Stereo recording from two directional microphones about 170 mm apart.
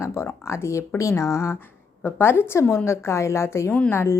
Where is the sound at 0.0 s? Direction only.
15° left (ahead or behind).